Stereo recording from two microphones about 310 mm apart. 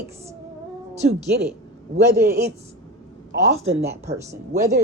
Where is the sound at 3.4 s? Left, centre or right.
Centre.